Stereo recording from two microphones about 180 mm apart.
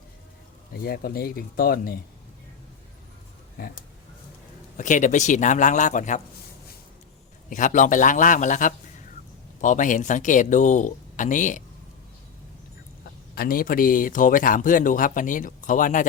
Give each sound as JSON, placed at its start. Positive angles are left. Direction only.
{"t": 0.7, "sound": "speech", "side_deg": 55}
{"t": 4.8, "sound": "speech", "side_deg": 45}
{"t": 7.5, "sound": "speech", "side_deg": 45}
{"t": 13.3, "sound": "speech", "side_deg": 55}